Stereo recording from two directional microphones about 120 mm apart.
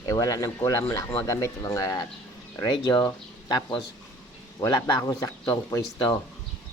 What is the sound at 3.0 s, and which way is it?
Speech, 35° left (ahead or behind).